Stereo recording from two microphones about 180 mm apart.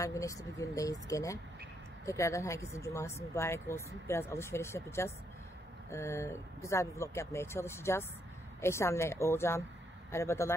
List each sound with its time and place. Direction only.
0.0 s speech: 15° left (ahead or behind)